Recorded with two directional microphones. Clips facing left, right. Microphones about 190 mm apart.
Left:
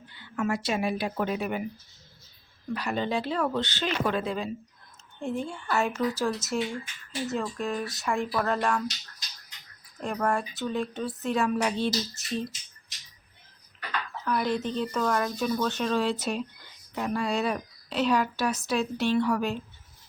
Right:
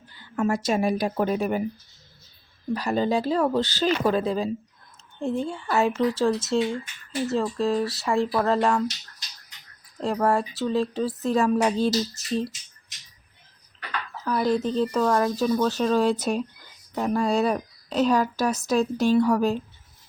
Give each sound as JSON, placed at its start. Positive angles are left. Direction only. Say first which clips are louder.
{"t": 0.1, "sound": "a woman's voice", "louder": "right 4 dB", "side_deg": -40}
{"t": 2.7, "sound": "speech", "louder": "right 5 dB", "side_deg": -35}
{"t": 7.3, "sound": "speech", "louder": "right 8 dB", "side_deg": -30}
{"t": 8.5, "sound": "speech", "louder": "right 6 dB", "side_deg": -20}
{"t": 9.0, "sound": "a sound", "louder": "right 1 dB", "side_deg": 0}
{"t": 10.0, "sound": "speech", "louder": "right 5 dB", "side_deg": -30}
{"t": 14.2, "sound": "speech", "louder": "right 5 dB", "side_deg": -35}